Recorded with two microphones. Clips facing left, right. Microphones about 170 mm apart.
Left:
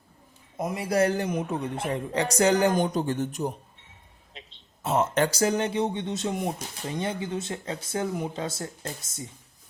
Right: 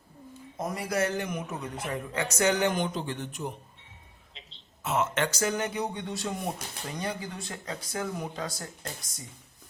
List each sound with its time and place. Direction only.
0.8 s speech: 35° left (ahead or behind)
4.8 s speech: 35° left (ahead or behind)